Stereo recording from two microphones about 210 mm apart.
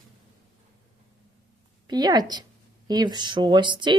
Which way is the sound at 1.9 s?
20° right (ahead or behind).